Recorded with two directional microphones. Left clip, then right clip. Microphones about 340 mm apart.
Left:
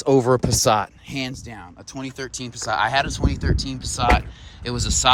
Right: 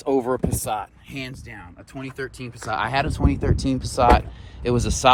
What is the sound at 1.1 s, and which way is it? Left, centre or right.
Speech, left.